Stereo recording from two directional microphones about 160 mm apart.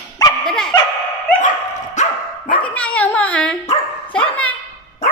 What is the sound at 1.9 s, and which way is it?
Dog, 50° left (ahead or behind).